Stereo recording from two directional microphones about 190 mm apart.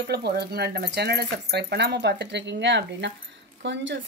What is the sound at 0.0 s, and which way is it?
Speech, 60° right (ahead or behind).